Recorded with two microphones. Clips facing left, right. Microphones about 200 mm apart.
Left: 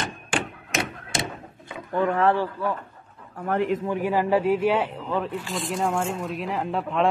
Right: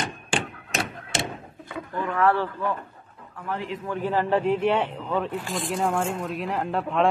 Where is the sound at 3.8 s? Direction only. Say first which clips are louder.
Left 2 dB; 10° left (ahead or behind).